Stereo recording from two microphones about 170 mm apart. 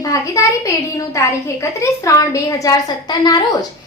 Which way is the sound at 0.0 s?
20° left (ahead or behind).